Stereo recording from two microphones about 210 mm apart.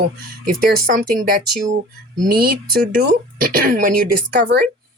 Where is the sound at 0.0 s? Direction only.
45° right (ahead or behind).